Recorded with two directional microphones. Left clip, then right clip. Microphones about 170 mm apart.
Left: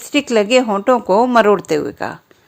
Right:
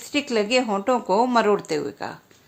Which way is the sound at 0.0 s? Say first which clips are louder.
Left 8 dB; 40° left (ahead or behind).